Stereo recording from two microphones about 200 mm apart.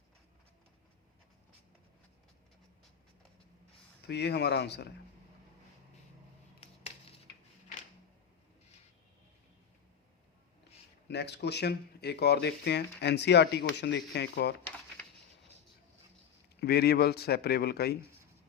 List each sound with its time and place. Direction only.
4.0 s speech: 55° left (ahead or behind)
11.1 s speech: 55° left (ahead or behind)
16.6 s a man's voice: 55° left (ahead or behind)